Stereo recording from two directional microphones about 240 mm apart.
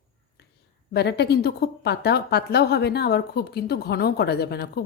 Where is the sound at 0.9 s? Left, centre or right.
Left.